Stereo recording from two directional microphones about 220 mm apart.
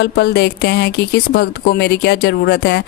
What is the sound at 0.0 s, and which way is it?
Speech, 50° left (ahead or behind).